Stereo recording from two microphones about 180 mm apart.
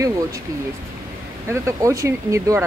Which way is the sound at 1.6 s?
15° right (ahead or behind).